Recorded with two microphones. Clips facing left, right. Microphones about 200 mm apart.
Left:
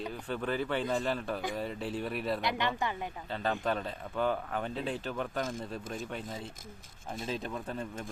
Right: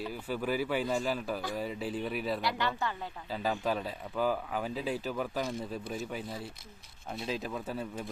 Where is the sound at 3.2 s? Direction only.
5° right (ahead or behind).